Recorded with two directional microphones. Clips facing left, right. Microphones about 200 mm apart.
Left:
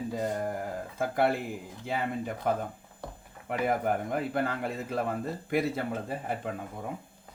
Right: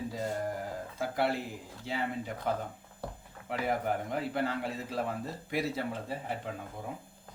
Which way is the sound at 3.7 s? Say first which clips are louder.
Left 3 dB; 55° left (ahead or behind).